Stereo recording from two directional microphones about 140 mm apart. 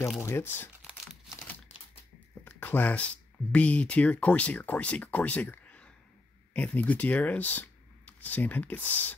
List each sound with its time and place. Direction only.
0.2 s speech: 15° left (ahead or behind)
2.4 s a sound: 15° left (ahead or behind)
3.5 s speech: 10° left (ahead or behind)